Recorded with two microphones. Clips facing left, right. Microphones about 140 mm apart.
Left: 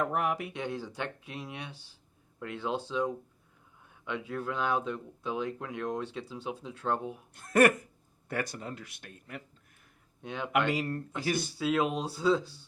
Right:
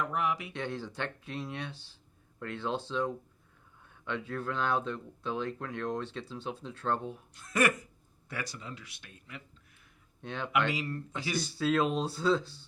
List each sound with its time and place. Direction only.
0.0 s speech: 50° left (ahead or behind)
0.5 s speech: 10° left (ahead or behind)
7.3 s speech: 55° left (ahead or behind)
10.2 s speech: 10° left (ahead or behind)
10.7 s speech: 50° left (ahead or behind)
11.5 s speech: 10° left (ahead or behind)